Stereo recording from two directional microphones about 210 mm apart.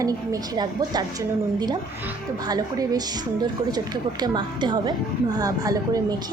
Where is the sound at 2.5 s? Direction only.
20° right (ahead or behind).